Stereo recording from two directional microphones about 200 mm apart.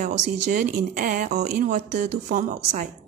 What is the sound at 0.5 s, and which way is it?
Speech, 45° right (ahead or behind).